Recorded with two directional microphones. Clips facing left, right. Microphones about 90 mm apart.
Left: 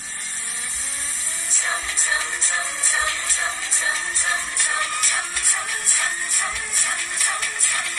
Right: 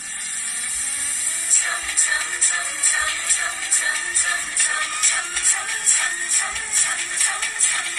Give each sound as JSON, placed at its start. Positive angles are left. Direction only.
{"t": 1.9, "sound": "music", "side_deg": 25}